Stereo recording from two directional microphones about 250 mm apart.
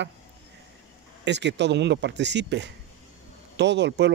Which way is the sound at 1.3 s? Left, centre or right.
Right.